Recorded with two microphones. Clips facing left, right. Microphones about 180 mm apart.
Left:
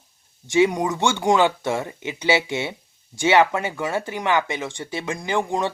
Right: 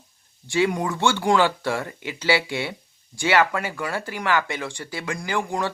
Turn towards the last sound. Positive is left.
turn(degrees=20)  # may be behind; listen again after turning